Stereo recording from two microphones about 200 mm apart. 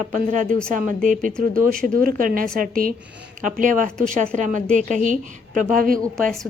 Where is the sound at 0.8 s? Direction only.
40° right (ahead or behind).